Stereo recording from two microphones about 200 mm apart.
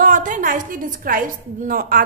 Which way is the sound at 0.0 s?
40° right (ahead or behind).